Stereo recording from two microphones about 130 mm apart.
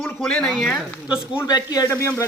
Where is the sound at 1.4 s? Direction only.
30° left (ahead or behind).